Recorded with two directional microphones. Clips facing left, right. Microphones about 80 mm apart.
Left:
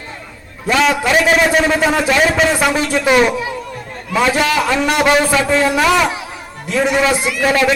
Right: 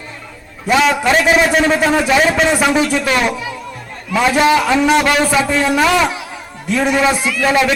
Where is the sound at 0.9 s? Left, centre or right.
Centre.